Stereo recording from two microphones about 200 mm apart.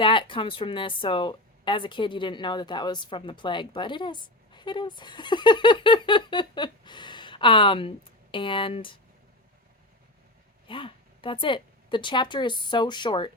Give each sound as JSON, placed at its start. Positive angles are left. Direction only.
{"t": 0.0, "sound": "a woman's voice", "side_deg": 25}
{"t": 10.7, "sound": "a woman's voice", "side_deg": 25}